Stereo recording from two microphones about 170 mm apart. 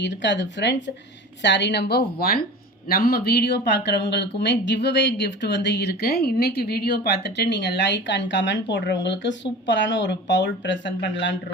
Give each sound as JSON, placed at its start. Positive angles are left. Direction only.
{"t": 0.0, "sound": "a woman's voice", "side_deg": 90}